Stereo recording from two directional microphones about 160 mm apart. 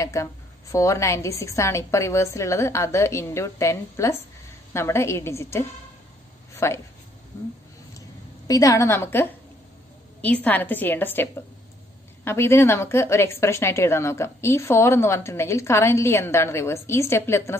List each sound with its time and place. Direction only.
0.0 s a woman's voice: 20° left (ahead or behind)
12.3 s a woman's voice: 15° left (ahead or behind)